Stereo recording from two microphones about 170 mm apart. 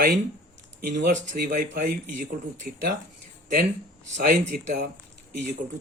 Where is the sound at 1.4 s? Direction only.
65° right (ahead or behind).